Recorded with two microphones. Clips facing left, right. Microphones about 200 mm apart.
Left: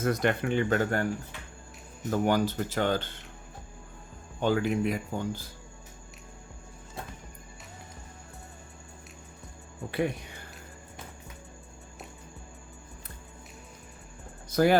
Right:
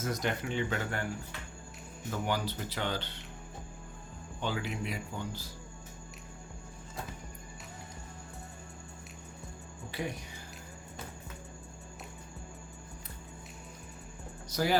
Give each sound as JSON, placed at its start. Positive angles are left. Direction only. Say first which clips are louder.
{"t": 0.0, "sound": "speech", "louder": "left 7 dB", "side_deg": 60}
{"t": 2.0, "sound": "speech", "louder": "left 8 dB", "side_deg": 45}
{"t": 4.4, "sound": "speech", "louder": "left 9 dB", "side_deg": 50}
{"t": 14.5, "sound": "speech", "louder": "left 7 dB", "side_deg": 55}